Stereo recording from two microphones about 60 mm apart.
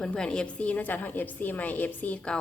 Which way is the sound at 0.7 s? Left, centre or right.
Left.